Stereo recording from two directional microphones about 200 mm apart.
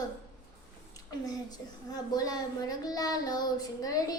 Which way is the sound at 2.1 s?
20° left (ahead or behind).